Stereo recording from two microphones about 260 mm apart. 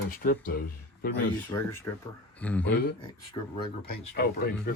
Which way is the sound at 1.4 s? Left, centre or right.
Centre.